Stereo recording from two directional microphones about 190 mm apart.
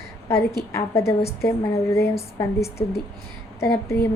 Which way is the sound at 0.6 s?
15° left (ahead or behind).